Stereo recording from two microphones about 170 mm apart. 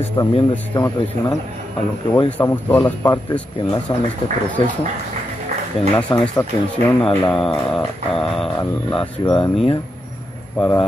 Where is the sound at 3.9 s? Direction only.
25° left (ahead or behind).